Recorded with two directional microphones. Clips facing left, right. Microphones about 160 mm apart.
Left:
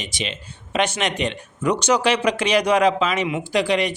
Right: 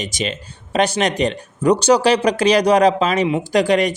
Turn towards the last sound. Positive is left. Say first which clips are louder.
# right 5 dB
turn(degrees=-45)  # may be behind; listen again after turning